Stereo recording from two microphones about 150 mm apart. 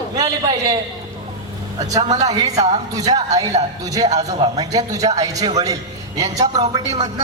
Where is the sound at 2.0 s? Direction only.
25° right (ahead or behind).